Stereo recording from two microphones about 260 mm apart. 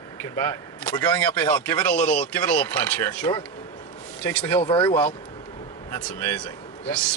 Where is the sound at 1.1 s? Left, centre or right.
Centre.